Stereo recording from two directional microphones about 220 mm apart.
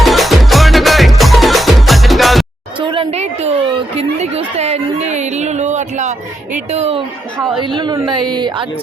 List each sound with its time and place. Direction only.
0.0 s music: centre (ahead or behind)
2.8 s a sound: 25° right (ahead or behind)
7.6 s a woman's voice: 20° right (ahead or behind)